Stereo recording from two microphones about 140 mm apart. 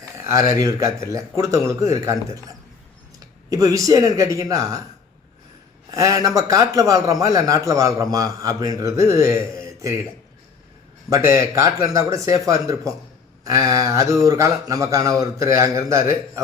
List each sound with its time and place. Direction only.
0.2 s a man's voice: 20° right (ahead or behind)
3.5 s a man's voice: 25° right (ahead or behind)
5.9 s a man's voice: 25° right (ahead or behind)
11.1 s a man's voice: 20° right (ahead or behind)